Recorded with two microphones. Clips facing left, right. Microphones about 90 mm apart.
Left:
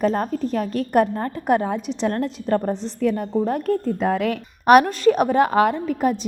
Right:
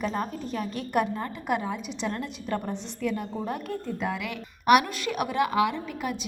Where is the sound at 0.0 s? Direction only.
45° left (ahead or behind).